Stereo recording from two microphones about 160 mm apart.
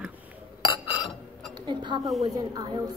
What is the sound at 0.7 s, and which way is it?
Chink, 30° left (ahead or behind).